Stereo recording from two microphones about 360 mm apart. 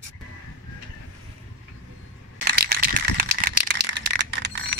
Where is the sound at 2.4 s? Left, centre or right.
Right.